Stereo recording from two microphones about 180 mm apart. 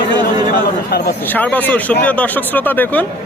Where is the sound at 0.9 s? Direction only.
60° left (ahead or behind).